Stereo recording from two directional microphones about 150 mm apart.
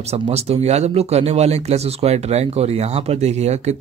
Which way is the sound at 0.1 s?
45° right (ahead or behind).